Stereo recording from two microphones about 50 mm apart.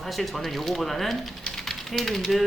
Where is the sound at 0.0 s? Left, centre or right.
Centre.